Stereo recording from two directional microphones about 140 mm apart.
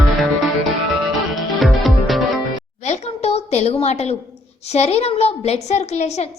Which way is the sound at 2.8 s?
50° left (ahead or behind).